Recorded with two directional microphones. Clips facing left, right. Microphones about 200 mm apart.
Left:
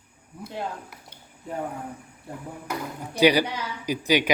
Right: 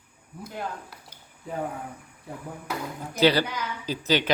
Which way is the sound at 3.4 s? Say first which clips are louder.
Left 1 dB; 30° left (ahead or behind).